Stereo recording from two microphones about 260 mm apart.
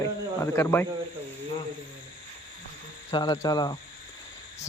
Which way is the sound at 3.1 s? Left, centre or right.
Centre.